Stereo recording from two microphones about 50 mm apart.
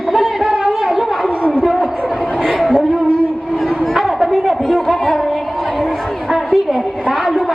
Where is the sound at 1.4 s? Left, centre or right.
Left.